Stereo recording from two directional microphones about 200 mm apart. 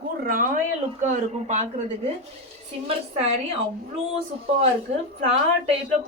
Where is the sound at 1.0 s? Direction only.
35° right (ahead or behind).